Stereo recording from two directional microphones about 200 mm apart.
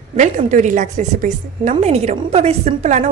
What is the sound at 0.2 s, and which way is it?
A woman's voice, 35° right (ahead or behind).